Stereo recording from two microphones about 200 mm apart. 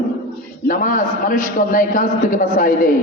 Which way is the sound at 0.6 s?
45° left (ahead or behind).